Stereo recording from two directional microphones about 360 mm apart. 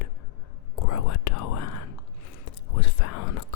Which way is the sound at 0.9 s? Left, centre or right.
Left.